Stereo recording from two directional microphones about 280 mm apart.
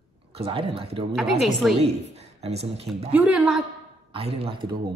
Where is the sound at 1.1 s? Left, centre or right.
Centre.